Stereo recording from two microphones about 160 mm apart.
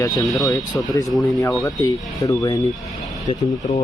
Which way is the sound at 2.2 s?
25° left (ahead or behind).